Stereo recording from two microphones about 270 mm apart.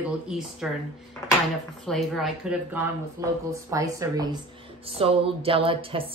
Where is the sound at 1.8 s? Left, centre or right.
Centre.